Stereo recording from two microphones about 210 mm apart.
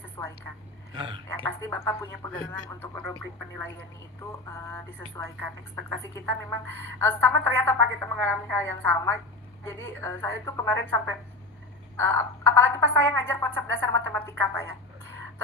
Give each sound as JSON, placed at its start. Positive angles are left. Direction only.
{"t": 0.2, "sound": "a woman's voice", "side_deg": 15}
{"t": 4.5, "sound": "a woman's voice", "side_deg": 15}
{"t": 11.9, "sound": "a woman's voice", "side_deg": 10}
{"t": 13.8, "sound": "speech", "side_deg": -70}
{"t": 14.1, "sound": "a woman's voice", "side_deg": 10}